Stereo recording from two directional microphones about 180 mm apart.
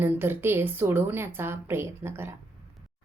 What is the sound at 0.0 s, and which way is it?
A woman's voice, 10° right (ahead or behind).